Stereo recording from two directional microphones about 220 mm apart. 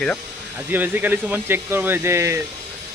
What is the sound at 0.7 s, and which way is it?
Speech, 10° right (ahead or behind).